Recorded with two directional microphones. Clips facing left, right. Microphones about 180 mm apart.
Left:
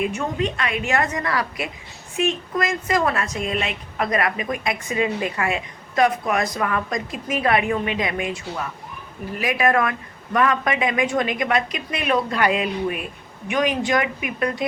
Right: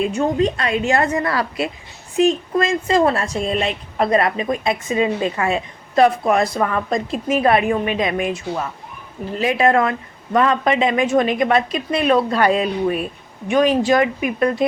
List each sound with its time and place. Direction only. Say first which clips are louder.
0.0 s speech: right 6 dB; 30° right (ahead or behind)